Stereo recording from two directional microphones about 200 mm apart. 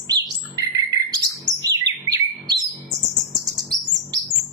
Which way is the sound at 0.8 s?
20° right (ahead or behind).